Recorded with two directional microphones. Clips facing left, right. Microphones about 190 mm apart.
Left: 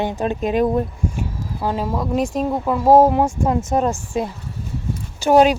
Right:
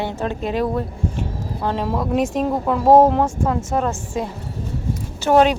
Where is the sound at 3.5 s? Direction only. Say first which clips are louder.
Left 2 dB; 20° left (ahead or behind).